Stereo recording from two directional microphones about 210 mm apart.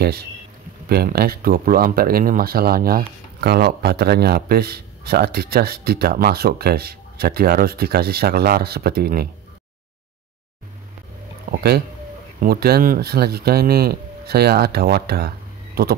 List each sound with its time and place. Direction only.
0.8 s a man's voice: 45° right (ahead or behind)
11.5 s a man's voice: 45° right (ahead or behind)